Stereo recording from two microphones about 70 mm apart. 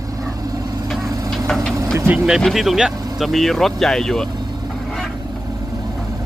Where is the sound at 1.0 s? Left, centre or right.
Right.